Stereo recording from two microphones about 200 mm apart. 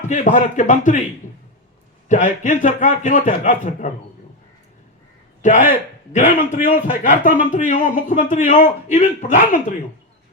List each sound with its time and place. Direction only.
0.1 s speech: 40° left (ahead or behind)
2.0 s speech: 40° left (ahead or behind)
5.4 s a man's voice: 40° left (ahead or behind)